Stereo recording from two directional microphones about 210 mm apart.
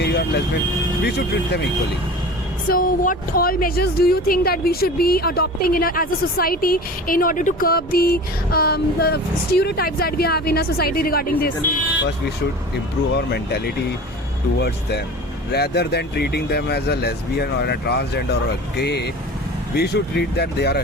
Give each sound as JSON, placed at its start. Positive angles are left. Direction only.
{"t": 0.0, "sound": "vehicle", "side_deg": 50}
{"t": 1.0, "sound": "speech", "side_deg": 50}
{"t": 2.6, "sound": "speech", "side_deg": 40}
{"t": 13.1, "sound": "speech", "side_deg": 50}
{"t": 14.6, "sound": "speech", "side_deg": 50}